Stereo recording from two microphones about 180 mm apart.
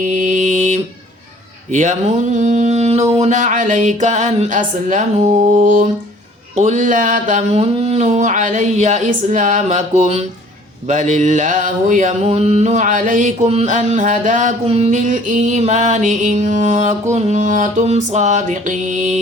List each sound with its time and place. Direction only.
0.0 s mantra: 45° right (ahead or behind)
1.7 s music: 40° right (ahead or behind)
10.8 s a sound: 40° right (ahead or behind)
14.7 s music: 40° right (ahead or behind)